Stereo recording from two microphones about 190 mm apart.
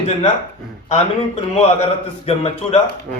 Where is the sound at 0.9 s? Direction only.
35° left (ahead or behind).